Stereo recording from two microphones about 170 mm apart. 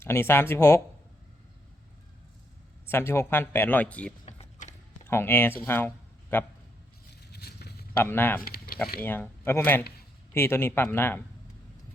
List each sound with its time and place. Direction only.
0.0 s speech: 15° left (ahead or behind)
2.8 s speech: 15° left (ahead or behind)
4.3 s power windows: 40° left (ahead or behind)
5.0 s speech: 15° left (ahead or behind)
7.3 s vehicle: 70° left (ahead or behind)
7.9 s speech: 10° left (ahead or behind)
8.4 s a sound: 60° left (ahead or behind)
9.0 s speech: 10° left (ahead or behind)